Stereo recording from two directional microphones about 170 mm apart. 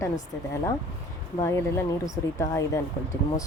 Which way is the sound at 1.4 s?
15° left (ahead or behind).